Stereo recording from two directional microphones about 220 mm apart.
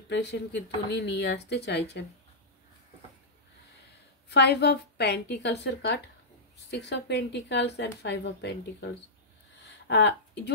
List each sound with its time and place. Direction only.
0.1 s speech: 50° left (ahead or behind)
4.3 s speech: 50° left (ahead or behind)
9.8 s speech: 50° left (ahead or behind)